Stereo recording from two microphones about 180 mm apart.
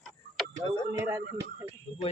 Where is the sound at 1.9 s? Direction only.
35° left (ahead or behind).